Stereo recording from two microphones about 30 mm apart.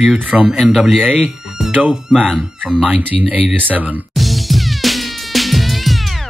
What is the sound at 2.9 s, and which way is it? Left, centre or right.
Speech, right.